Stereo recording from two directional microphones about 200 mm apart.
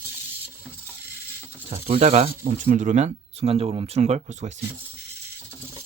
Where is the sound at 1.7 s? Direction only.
35° right (ahead or behind).